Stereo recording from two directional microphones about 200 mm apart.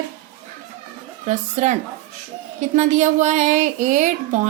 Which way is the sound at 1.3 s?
35° right (ahead or behind).